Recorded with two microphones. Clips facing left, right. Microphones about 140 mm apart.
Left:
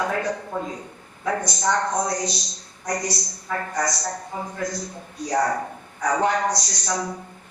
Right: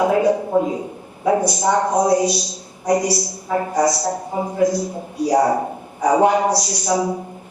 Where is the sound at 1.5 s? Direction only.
10° right (ahead or behind).